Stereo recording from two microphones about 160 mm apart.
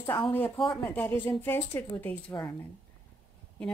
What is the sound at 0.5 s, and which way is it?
Speech, 30° left (ahead or behind).